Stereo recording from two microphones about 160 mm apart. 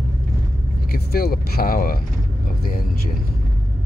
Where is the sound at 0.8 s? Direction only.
75° left (ahead or behind).